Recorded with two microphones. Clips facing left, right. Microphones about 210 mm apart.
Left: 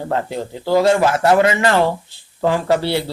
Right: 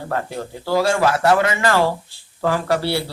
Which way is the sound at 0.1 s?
20° left (ahead or behind).